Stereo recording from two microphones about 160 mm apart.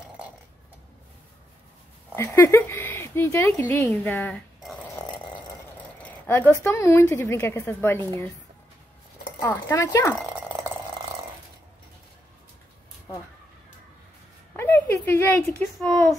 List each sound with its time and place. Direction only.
2.1 s speech: 20° left (ahead or behind)
6.0 s a woman's voice: 15° left (ahead or behind)
9.4 s speech: 20° left (ahead or behind)
14.6 s speech: 10° left (ahead or behind)